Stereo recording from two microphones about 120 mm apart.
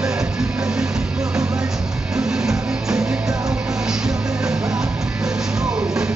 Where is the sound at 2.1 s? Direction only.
5° right (ahead or behind).